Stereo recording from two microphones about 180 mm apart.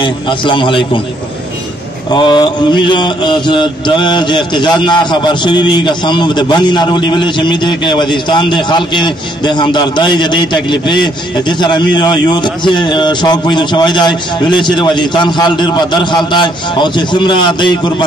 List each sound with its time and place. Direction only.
0.0 s mantra: 25° left (ahead or behind)
2.0 s mantra: 25° left (ahead or behind)